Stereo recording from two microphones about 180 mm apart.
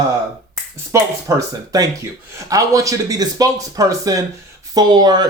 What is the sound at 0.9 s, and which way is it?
Speech, 15° right (ahead or behind).